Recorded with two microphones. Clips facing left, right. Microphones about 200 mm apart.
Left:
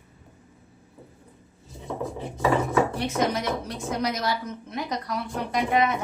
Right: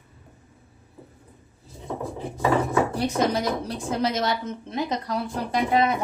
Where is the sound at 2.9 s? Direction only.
35° right (ahead or behind).